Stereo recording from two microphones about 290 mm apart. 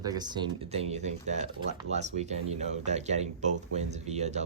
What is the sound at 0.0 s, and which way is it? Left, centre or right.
Speech, centre.